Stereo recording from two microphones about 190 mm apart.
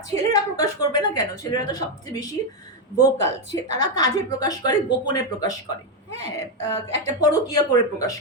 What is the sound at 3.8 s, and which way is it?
Speech, 20° left (ahead or behind).